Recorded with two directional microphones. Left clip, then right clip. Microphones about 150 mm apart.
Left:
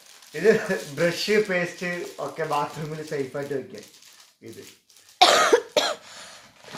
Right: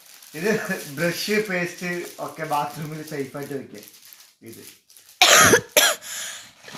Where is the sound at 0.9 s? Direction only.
35° left (ahead or behind).